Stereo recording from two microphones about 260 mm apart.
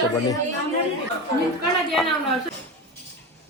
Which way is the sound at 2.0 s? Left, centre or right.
Centre.